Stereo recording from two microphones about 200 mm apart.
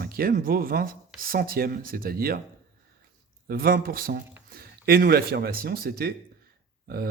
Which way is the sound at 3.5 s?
45° right (ahead or behind).